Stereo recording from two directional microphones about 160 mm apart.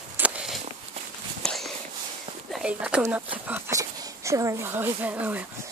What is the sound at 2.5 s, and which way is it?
Speech, 5° right (ahead or behind).